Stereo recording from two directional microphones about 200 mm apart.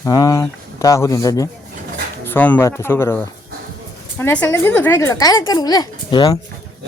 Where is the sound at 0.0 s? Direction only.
15° left (ahead or behind).